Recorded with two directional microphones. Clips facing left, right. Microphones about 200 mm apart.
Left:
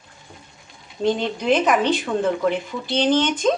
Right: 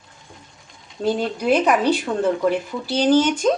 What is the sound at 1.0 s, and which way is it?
A woman's voice, 5° right (ahead or behind).